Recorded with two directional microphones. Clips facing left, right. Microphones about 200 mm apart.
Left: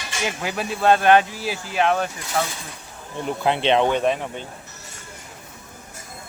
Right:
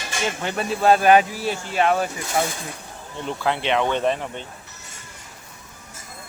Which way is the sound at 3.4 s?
25° left (ahead or behind).